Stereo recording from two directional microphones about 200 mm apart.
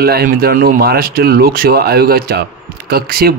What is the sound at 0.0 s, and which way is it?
Speech, 50° right (ahead or behind).